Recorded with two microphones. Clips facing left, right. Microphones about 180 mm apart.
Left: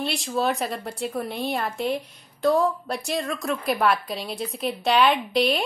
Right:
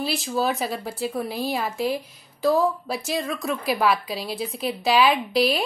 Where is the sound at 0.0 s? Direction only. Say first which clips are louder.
Right 1 dB; centre (ahead or behind).